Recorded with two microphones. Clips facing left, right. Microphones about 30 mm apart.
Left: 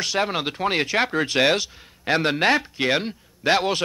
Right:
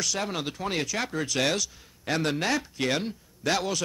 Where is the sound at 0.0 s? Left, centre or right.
Left.